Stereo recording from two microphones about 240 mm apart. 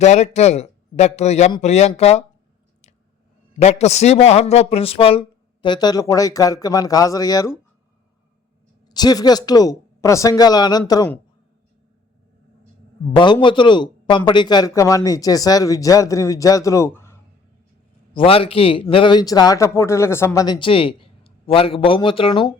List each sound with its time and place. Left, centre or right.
0.0 s a man's voice: left
3.6 s a man's voice: left
8.9 s a man's voice: centre
13.1 s a man's voice: centre
18.1 s a man's voice: left